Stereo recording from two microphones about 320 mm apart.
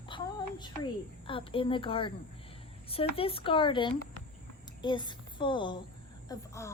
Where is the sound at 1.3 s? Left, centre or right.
Centre.